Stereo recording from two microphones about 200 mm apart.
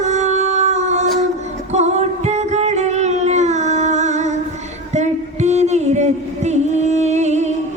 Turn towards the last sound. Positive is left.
turn(degrees=-35)  # may be behind; listen again after turning